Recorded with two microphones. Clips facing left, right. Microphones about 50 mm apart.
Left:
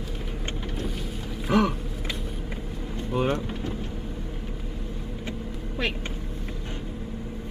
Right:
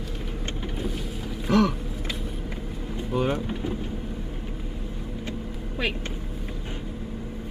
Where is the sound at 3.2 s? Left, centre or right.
Centre.